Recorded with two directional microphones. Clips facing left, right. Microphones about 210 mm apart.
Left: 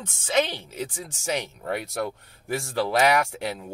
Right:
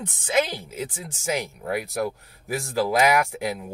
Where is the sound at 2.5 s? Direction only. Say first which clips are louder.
Right 1 dB; 10° right (ahead or behind).